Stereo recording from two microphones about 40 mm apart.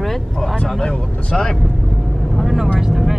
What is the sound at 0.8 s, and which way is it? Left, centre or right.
Speech, centre.